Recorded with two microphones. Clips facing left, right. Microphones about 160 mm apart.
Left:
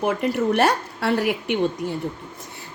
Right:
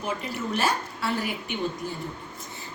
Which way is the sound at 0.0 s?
65° left (ahead or behind).